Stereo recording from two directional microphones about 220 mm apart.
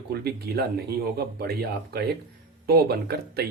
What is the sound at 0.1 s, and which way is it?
Speech, 45° right (ahead or behind).